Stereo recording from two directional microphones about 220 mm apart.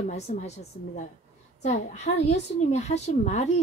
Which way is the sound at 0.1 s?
30° left (ahead or behind).